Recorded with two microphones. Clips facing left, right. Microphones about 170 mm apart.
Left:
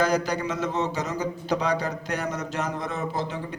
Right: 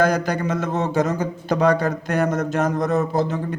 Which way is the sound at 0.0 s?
50° right (ahead or behind).